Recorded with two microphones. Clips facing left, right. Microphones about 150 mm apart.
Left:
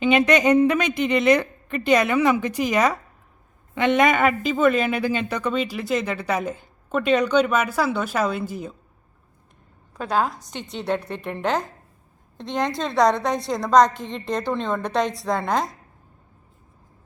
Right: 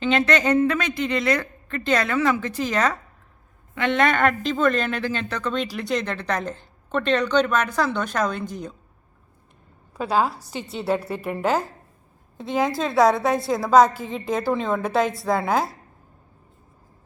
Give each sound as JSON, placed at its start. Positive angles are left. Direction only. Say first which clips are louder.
{"t": 0.0, "sound": "a woman's voice", "louder": "left 3 dB", "side_deg": 15}
{"t": 10.0, "sound": "a woman's voice", "louder": "right 1 dB", "side_deg": -5}